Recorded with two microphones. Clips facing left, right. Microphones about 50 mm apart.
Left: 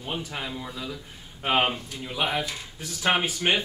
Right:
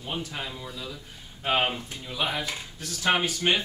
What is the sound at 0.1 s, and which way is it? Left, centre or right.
Speech, centre.